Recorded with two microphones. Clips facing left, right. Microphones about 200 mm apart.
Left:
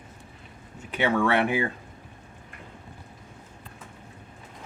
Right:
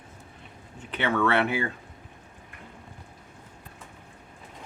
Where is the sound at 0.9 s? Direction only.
10° left (ahead or behind).